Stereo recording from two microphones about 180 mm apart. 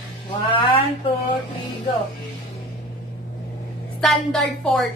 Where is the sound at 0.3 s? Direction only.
30° left (ahead or behind).